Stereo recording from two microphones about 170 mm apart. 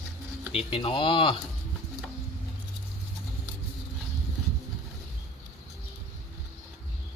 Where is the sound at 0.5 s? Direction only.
35° left (ahead or behind).